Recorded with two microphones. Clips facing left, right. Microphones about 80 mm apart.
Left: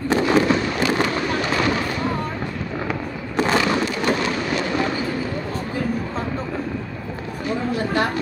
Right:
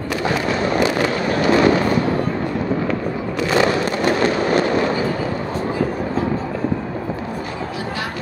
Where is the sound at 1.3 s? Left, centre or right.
Right.